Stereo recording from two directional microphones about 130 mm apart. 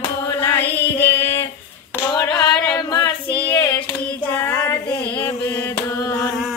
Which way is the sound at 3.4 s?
15° left (ahead or behind).